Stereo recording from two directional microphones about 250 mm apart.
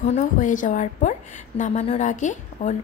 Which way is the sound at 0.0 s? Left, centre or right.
Left.